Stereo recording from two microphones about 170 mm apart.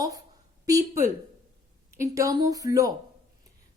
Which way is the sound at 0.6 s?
20° right (ahead or behind).